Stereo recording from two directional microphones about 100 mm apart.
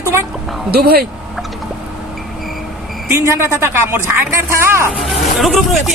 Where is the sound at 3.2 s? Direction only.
25° right (ahead or behind).